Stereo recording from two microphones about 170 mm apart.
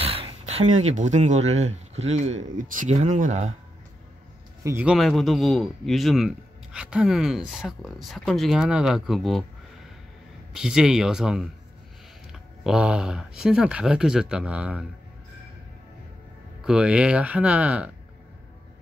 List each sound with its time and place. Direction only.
0.0 s speech: 35° right (ahead or behind)
4.6 s speech: 10° right (ahead or behind)
4.9 s a man's voice: centre (ahead or behind)
10.5 s a man's voice: 5° right (ahead or behind)
16.6 s speech: 5° right (ahead or behind)